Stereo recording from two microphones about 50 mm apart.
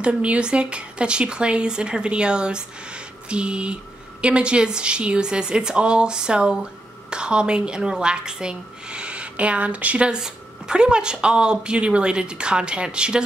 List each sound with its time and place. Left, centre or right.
0.0 s speech: right